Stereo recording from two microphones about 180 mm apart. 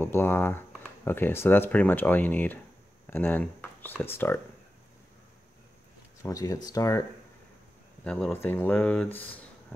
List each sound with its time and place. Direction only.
0.0 s speech: 15° left (ahead or behind)
6.2 s speech: 20° left (ahead or behind)
8.0 s speech: 5° left (ahead or behind)